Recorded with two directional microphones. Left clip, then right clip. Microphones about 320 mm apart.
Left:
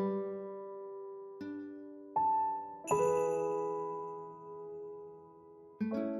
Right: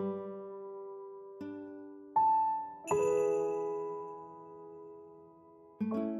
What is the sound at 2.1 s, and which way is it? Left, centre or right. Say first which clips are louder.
Music: right 3 dB; right.